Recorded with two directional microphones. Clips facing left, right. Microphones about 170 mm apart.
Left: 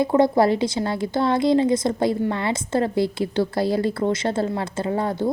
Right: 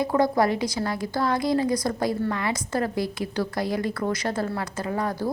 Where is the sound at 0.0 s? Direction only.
25° left (ahead or behind).